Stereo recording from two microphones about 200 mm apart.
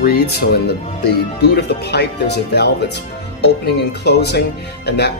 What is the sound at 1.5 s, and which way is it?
Speech, 55° left (ahead or behind).